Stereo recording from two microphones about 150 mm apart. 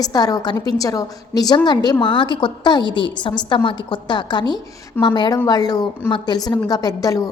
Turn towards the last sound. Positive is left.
turn(degrees=25)  # may be behind; listen again after turning